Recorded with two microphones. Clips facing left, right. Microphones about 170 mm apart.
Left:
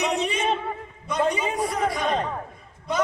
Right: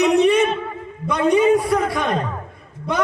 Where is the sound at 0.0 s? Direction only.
60° right (ahead or behind).